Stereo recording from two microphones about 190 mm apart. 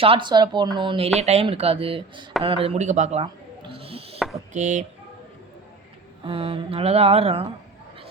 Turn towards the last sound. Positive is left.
turn(degrees=-30)  # may be behind; listen again after turning